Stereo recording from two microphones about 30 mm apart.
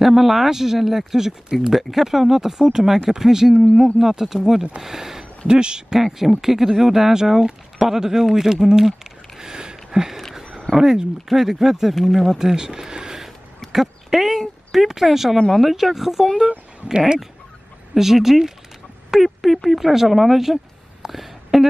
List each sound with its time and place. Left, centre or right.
0.0 s speech: centre
5.5 s speech: right
5.9 s speech: centre
9.4 s a sound: right
10.8 s speech: right
11.2 s speech: centre
12.4 s speech: right
13.7 s speech: centre
17.9 s speech: centre
21.1 s a sound: centre